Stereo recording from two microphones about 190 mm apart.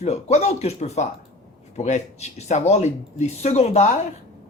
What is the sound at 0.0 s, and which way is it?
Speech, 35° left (ahead or behind).